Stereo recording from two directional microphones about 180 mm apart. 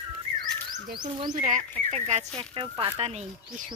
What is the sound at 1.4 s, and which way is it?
Speech, 40° right (ahead or behind).